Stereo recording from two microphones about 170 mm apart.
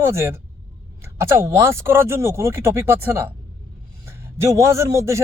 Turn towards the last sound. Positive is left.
turn(degrees=-15)  # may be behind; listen again after turning